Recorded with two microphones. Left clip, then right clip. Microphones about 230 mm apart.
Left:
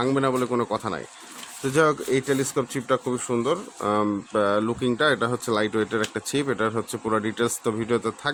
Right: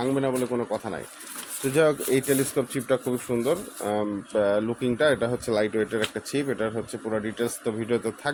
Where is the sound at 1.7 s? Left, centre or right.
Centre.